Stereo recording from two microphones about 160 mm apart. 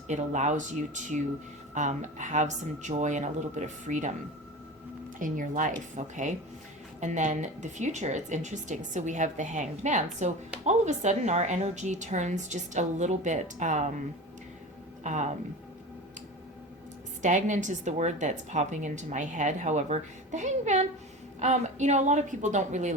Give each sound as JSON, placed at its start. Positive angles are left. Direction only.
{"t": 0.1, "sound": "a woman's voice", "side_deg": -45}
{"t": 5.2, "sound": "a woman's voice", "side_deg": -55}
{"t": 15.0, "sound": "a woman's voice", "side_deg": -50}
{"t": 17.2, "sound": "a woman's voice", "side_deg": -50}